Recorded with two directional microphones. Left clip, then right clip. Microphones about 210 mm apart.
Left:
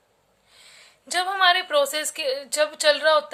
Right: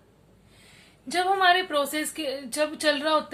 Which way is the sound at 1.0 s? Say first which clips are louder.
Left 1 dB; 45° left (ahead or behind).